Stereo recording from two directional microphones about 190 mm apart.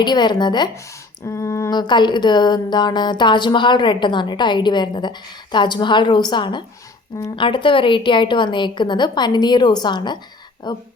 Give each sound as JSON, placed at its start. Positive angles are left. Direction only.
{"t": 0.0, "sound": "speech", "side_deg": 25}